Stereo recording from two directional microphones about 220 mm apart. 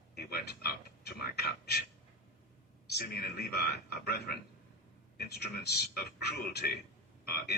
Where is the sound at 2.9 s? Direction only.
45° left (ahead or behind).